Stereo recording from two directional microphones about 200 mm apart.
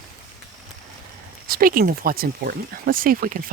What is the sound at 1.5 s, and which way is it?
Speech, 45° right (ahead or behind).